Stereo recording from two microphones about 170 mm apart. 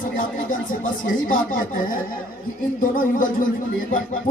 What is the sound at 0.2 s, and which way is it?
A man's voice, 50° left (ahead or behind).